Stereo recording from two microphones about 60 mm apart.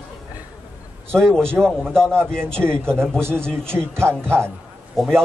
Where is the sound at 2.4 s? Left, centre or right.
Right.